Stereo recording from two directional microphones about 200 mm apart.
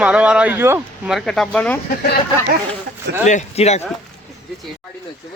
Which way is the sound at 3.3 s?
35° left (ahead or behind).